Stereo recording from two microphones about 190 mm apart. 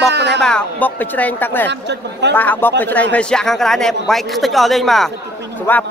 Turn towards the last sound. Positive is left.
turn(degrees=10)  # may be behind; listen again after turning